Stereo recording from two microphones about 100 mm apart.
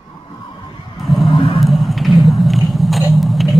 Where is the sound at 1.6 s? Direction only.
Centre (ahead or behind).